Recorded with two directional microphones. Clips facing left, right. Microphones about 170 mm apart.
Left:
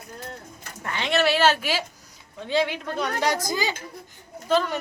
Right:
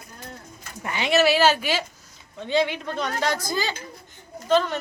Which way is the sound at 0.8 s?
5° right (ahead or behind).